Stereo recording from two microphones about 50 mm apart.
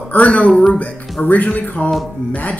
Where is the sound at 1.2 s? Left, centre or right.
Left.